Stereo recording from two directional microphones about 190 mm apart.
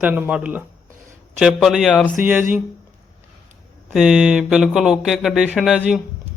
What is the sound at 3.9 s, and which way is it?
Speech, 5° right (ahead or behind).